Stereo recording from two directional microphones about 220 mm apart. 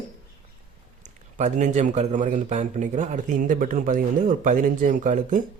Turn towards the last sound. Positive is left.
turn(degrees=-35)  # may be behind; listen again after turning